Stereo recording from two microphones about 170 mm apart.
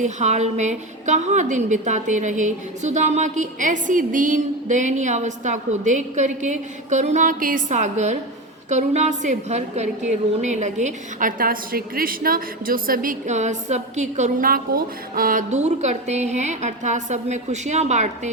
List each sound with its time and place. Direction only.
0.0 s a woman's voice: 45° right (ahead or behind)